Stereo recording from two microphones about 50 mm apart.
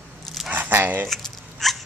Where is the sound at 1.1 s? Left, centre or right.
Centre.